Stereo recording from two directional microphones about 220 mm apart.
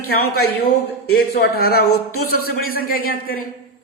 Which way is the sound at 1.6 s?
45° left (ahead or behind).